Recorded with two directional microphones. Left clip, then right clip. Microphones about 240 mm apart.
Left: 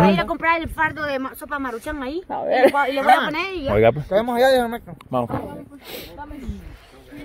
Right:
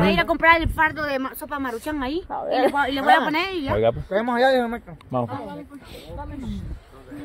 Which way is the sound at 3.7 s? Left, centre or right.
Left.